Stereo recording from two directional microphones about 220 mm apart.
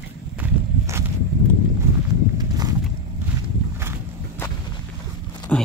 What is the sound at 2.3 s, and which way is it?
Walk, 15° right (ahead or behind).